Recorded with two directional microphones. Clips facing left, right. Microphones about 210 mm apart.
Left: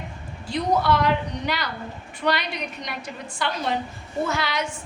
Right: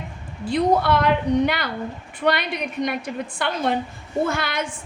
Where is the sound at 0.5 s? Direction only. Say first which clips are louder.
Right 3 dB; 55° right (ahead or behind).